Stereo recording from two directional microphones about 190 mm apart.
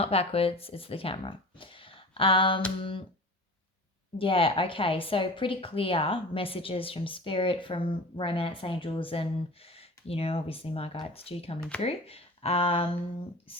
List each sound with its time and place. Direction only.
0.0 s speech: 30° left (ahead or behind)
4.2 s a woman's voice: 30° left (ahead or behind)